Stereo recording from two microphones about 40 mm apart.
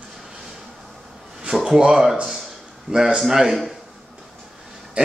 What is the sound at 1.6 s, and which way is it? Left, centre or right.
Speech, centre.